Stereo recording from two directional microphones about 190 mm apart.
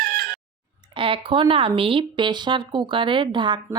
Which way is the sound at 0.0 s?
50° right (ahead or behind).